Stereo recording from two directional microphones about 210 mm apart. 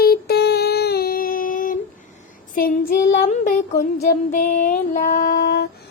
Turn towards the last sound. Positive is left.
turn(degrees=45)  # may be behind; listen again after turning